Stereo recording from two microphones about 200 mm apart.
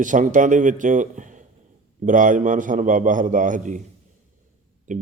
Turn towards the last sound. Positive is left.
turn(degrees=-40)  # may be behind; listen again after turning